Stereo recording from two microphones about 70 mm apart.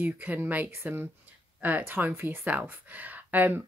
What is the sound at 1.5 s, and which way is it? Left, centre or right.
Speech, right.